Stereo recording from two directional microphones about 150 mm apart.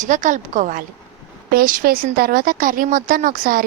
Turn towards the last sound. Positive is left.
turn(degrees=-65)  # may be behind; listen again after turning